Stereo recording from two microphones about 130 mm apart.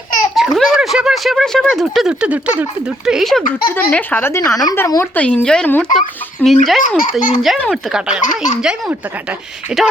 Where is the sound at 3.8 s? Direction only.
15° left (ahead or behind).